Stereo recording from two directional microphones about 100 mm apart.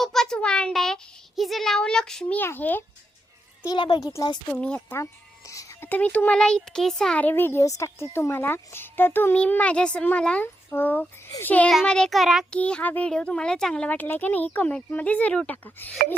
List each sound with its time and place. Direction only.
0.0 s a sound: 5° left (ahead or behind)
1.4 s a child's voice: centre (ahead or behind)
2.4 s a child's voice: 20° left (ahead or behind)
3.7 s a child's voice: 50° left (ahead or behind)
4.0 s speech: 40° left (ahead or behind)
4.5 s speech: 10° left (ahead or behind)
5.5 s a sound: 35° left (ahead or behind)
5.8 s speech: 15° left (ahead or behind)
7.2 s a child's voice: 20° left (ahead or behind)
10.4 s a child's voice: 20° left (ahead or behind)
11.7 s a child's voice: 5° left (ahead or behind)
12.5 s speech: 10° left (ahead or behind)